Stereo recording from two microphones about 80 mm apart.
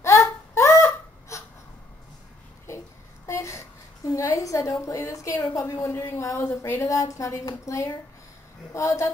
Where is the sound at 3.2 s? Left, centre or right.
Left.